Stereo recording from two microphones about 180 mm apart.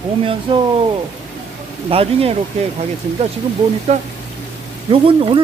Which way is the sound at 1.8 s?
30° right (ahead or behind).